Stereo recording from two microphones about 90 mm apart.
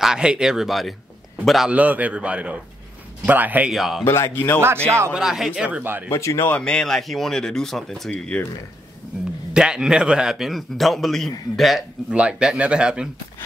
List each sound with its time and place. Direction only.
0.0 s a man's voice: 10° right (ahead or behind)
1.7 s speech: 15° right (ahead or behind)
3.7 s a man's voice: 5° right (ahead or behind)
4.0 s speech: 30° left (ahead or behind)
4.8 s speech: 30° right (ahead or behind)
5.1 s speech: 5° right (ahead or behind)
6.0 s speech: 30° left (ahead or behind)
6.5 s a man's voice: 10° left (ahead or behind)
8.1 s speech: 15° left (ahead or behind)
9.5 s a man's voice: 10° right (ahead or behind)
12.2 s speech: 10° right (ahead or behind)